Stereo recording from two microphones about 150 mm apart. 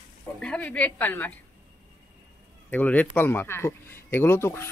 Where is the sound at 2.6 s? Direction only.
10° left (ahead or behind).